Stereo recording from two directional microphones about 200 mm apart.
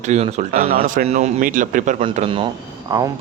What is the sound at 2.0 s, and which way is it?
A man's voice, 30° right (ahead or behind).